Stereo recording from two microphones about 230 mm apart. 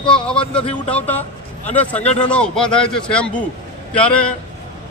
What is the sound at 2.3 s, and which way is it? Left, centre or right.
A man's voice, centre.